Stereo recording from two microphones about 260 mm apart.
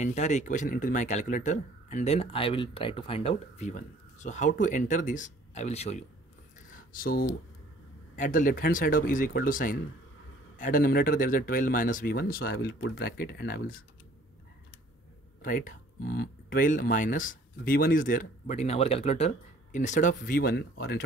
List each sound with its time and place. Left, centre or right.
0.0 s speech: left
15.4 s speech: left